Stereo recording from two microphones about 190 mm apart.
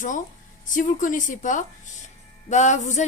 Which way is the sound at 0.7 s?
45° left (ahead or behind).